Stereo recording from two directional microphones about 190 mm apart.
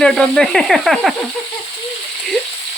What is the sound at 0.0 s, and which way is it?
Speech, 5° left (ahead or behind).